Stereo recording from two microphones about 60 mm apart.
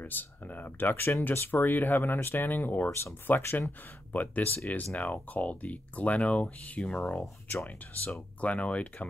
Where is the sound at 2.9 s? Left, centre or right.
Left.